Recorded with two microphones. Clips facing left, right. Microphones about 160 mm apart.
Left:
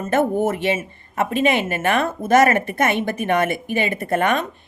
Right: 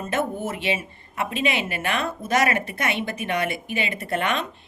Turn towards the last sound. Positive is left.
turn(degrees=45)  # may be behind; listen again after turning